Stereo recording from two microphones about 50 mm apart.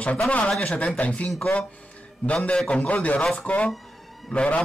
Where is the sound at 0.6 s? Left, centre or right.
Left.